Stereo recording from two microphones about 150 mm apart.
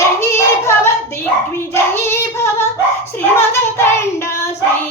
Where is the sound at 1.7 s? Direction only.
15° left (ahead or behind).